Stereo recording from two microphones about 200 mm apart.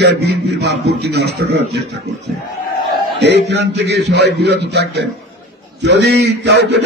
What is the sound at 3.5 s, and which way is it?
A man's voice, 60° right (ahead or behind).